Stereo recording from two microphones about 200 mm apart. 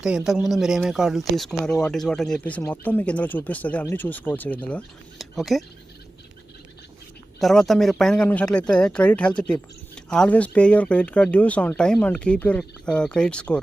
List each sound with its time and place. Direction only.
0.3 s a man's voice: centre (ahead or behind)
7.3 s a man's voice: centre (ahead or behind)